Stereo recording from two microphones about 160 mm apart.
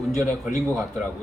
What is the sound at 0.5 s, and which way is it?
Speech, 15° right (ahead or behind).